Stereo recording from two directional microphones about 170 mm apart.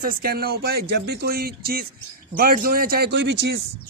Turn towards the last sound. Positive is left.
turn(degrees=-90)